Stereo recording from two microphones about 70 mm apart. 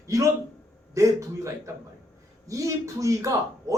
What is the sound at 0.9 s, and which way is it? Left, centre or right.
A man's voice, right.